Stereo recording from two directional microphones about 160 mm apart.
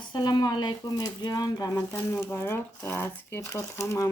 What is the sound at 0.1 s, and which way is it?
Speech, 25° left (ahead or behind).